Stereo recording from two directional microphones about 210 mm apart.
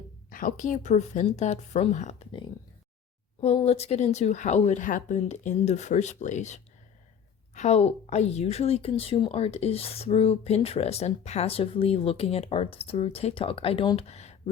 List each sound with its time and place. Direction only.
0.3 s speech: 40° left (ahead or behind)
3.4 s a woman's voice: 30° left (ahead or behind)